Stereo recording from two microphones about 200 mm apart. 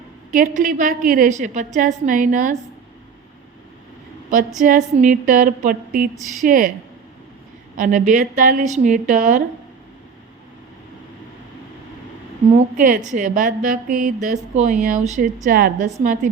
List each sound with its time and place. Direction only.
0.3 s music: 45° right (ahead or behind)
4.6 s music: 40° right (ahead or behind)
7.8 s music: 40° right (ahead or behind)
12.5 s music: 40° right (ahead or behind)
15.4 s a woman's voice: 45° right (ahead or behind)